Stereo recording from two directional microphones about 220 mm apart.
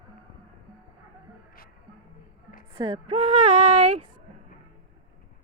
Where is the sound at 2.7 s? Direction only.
20° right (ahead or behind).